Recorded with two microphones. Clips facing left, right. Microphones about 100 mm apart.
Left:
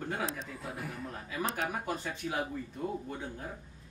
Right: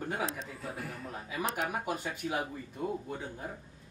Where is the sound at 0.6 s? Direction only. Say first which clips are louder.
Even; 15° left (ahead or behind).